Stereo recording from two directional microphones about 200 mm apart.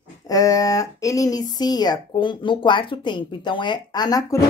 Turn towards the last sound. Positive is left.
turn(degrees=20)  # may be behind; listen again after turning